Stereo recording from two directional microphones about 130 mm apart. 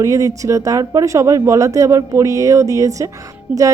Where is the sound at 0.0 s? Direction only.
25° right (ahead or behind).